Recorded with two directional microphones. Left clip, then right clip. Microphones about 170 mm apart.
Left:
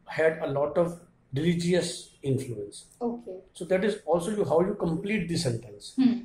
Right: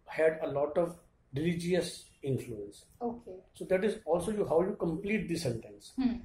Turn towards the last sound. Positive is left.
turn(degrees=20)  # may be behind; listen again after turning